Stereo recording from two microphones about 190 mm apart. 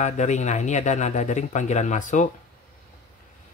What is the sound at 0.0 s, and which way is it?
Speech, 40° left (ahead or behind).